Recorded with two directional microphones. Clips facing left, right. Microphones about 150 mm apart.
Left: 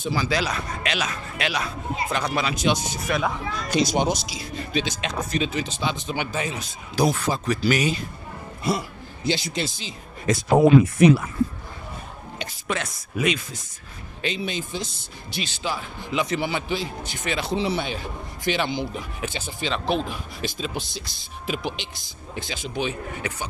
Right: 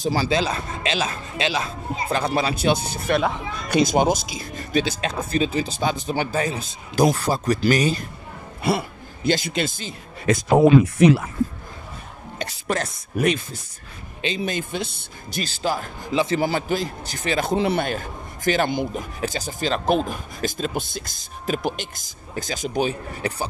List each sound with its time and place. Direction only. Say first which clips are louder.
0.0 s speech: right 3 dB; 40° right (ahead or behind)
0.3 s speech: right 3 dB; 25° right (ahead or behind)
3.6 s a man's voice: right 4 dB; 55° right (ahead or behind)
4.8 s speech: right 2 dB; 35° right (ahead or behind)
8.6 s a sound: right 3 dB; 65° right (ahead or behind)
9.3 s a man's voice: right 4 dB; 50° right (ahead or behind)
12.6 s speech: right 3 dB; 40° right (ahead or behind)
14.6 s a man's voice: right 3 dB; 60° right (ahead or behind); by 23.5 s 35° right (ahead or behind)